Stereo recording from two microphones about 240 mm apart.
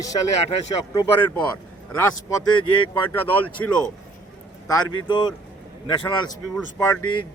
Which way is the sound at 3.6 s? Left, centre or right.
Centre.